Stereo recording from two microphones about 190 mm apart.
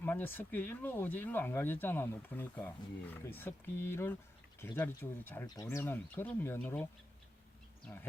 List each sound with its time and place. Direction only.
0.0 s speech: 10° left (ahead or behind)
7.9 s speech: 5° left (ahead or behind)